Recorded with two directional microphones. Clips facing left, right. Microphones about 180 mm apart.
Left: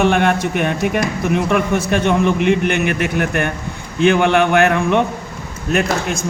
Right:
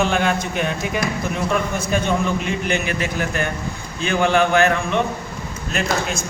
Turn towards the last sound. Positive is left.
turn(degrees=55)  # may be behind; listen again after turning